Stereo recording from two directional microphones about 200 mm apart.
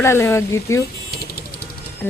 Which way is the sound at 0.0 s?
15° left (ahead or behind).